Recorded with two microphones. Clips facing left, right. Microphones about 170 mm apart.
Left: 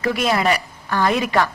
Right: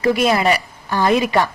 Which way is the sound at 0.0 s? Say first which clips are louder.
Right 3 dB; 15° right (ahead or behind).